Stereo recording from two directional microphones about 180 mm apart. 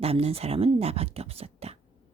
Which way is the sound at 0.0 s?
35° right (ahead or behind).